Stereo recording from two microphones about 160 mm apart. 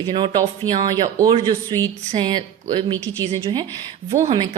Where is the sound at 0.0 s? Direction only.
30° right (ahead or behind).